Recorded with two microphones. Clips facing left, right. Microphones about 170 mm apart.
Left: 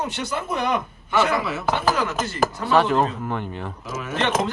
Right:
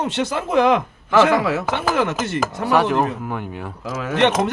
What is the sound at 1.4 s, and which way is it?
Chopping, 90° right.